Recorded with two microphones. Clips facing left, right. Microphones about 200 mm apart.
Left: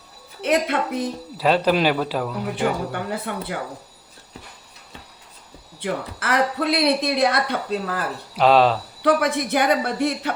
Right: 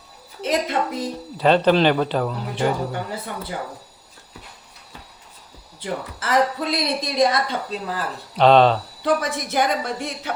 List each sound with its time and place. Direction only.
0.4 s speech: 60° left (ahead or behind)
1.4 s speech: 5° left (ahead or behind)
2.9 s speech: 60° left (ahead or behind)
5.8 s speech: 65° left (ahead or behind)
8.4 s speech: 5° left (ahead or behind)
9.0 s speech: 60° left (ahead or behind)